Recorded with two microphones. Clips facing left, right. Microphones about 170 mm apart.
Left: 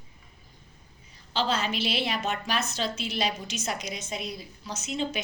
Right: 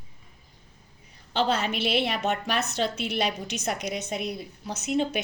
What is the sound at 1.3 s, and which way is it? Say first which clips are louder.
A woman's voice: right 2 dB; 60° right (ahead or behind).